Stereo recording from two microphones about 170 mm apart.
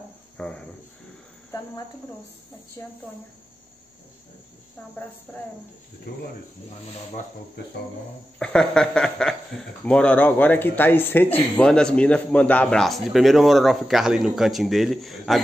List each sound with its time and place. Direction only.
0.4 s cricket: 5° left (ahead or behind)
6.1 s speech: 65° left (ahead or behind)
8.4 s speech: 5° left (ahead or behind)